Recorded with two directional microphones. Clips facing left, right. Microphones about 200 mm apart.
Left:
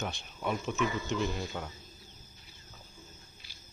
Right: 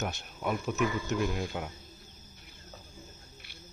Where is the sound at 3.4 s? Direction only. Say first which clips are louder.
Right 5 dB; 60° right (ahead or behind).